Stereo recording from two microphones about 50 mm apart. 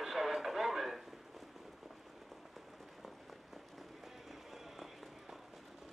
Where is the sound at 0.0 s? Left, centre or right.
Centre.